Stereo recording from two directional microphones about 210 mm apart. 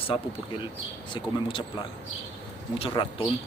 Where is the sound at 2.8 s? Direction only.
25° left (ahead or behind).